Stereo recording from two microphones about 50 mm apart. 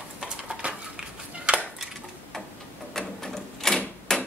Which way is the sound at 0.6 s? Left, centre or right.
Right.